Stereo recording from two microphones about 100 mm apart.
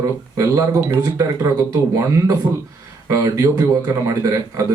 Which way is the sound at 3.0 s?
35° right (ahead or behind).